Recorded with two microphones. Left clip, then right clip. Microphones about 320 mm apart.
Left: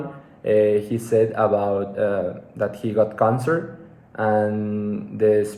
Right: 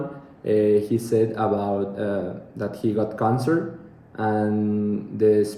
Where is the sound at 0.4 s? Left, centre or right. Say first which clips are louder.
Left 2 dB; centre.